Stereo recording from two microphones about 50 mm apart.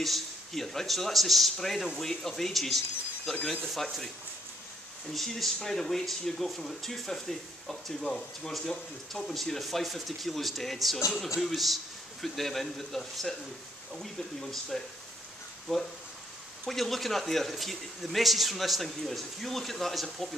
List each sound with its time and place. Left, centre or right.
0.0 s speech: centre
5.1 s speech: centre
11.1 s speech: centre